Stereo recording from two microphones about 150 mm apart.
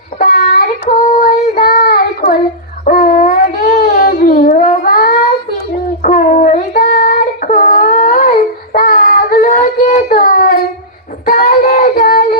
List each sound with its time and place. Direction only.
0.2 s child singing: 65° left (ahead or behind)
2.8 s dog: 65° left (ahead or behind)
6.0 s child singing: 60° left (ahead or behind)